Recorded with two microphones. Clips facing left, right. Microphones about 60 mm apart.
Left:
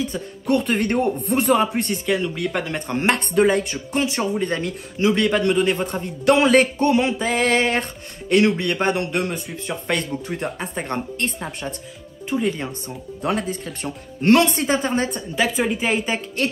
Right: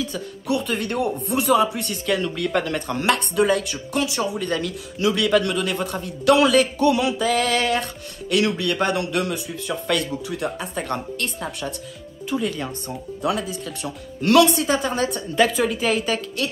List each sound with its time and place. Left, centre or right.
0.1 s speech: left
0.6 s speech: left
2.0 s speech: centre
12.8 s speech: left
16.4 s speech: left